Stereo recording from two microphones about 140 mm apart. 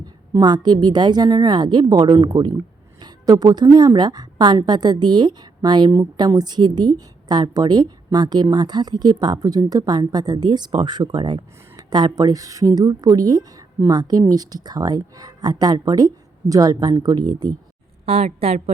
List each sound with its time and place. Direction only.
0.3 s a woman's voice: 30° right (ahead or behind)
18.0 s a woman's voice: 45° right (ahead or behind)